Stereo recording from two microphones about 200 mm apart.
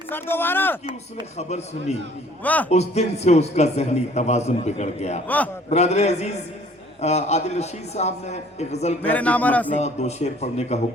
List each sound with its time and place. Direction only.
0.1 s speech: 10° left (ahead or behind)
1.4 s a man's voice: 35° left (ahead or behind)
2.4 s speech: 10° left (ahead or behind)
2.6 s a man's voice: 35° left (ahead or behind)
9.0 s speech: 5° left (ahead or behind)
9.7 s a man's voice: 35° left (ahead or behind)